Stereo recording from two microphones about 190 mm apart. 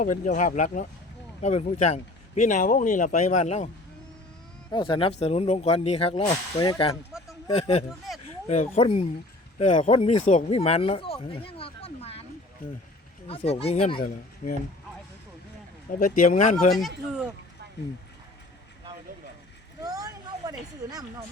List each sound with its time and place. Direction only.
0.0 s speech: 45° left (ahead or behind)
4.7 s speech: 25° left (ahead or behind)
7.1 s a sound: 5° right (ahead or behind)
7.5 s speech: 35° left (ahead or behind)
13.2 s speech: 30° left (ahead or behind)
16.0 s speech: 40° left (ahead or behind)
19.8 s a sound: 20° right (ahead or behind)